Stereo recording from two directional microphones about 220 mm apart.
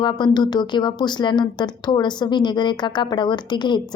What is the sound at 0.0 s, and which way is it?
Speech, 20° left (ahead or behind).